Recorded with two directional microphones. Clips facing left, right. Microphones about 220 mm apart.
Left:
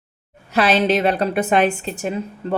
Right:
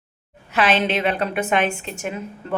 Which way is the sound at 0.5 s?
40° left (ahead or behind).